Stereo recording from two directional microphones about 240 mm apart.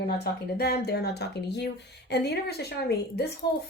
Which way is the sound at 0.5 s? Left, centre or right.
Left.